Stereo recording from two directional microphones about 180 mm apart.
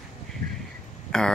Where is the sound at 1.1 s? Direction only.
5° left (ahead or behind).